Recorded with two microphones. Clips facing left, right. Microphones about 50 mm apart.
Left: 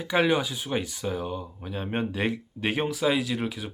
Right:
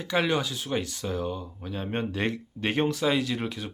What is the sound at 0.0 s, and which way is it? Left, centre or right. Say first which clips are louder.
Speech: left 2 dB; centre.